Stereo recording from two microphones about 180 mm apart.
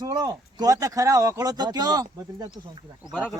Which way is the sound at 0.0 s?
20° right (ahead or behind).